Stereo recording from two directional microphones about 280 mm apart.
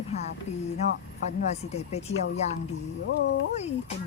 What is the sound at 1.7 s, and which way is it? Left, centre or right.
Speech, left.